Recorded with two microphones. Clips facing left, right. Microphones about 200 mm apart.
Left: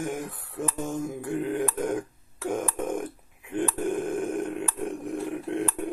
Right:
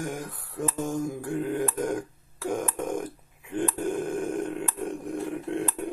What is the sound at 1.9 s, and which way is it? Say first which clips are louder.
Burping: left 1 dB; centre (ahead or behind).